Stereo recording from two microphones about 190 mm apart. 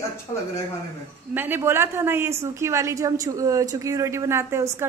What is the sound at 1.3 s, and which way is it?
A woman's voice, 10° right (ahead or behind).